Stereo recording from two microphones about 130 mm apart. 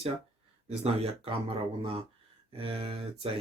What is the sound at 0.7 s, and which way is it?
Speech, 50° right (ahead or behind).